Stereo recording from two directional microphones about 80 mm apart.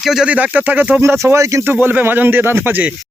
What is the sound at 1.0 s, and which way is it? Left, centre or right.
Speech, right.